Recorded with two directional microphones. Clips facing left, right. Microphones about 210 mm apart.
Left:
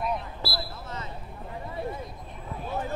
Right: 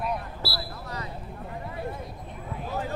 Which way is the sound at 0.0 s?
10° right (ahead or behind).